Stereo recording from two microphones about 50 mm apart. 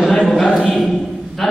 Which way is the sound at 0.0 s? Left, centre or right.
Centre.